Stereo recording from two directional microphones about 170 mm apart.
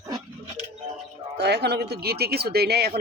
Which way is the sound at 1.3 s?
80° right.